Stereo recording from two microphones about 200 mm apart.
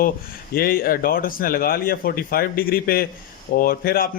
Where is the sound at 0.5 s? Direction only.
45° left (ahead or behind).